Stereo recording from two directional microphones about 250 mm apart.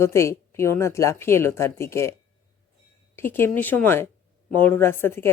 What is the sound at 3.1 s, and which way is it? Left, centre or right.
Speech, centre.